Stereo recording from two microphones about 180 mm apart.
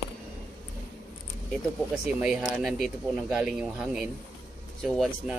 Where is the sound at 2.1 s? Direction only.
5° right (ahead or behind).